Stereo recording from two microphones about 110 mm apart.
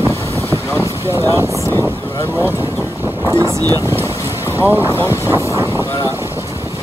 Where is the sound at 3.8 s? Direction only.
25° left (ahead or behind).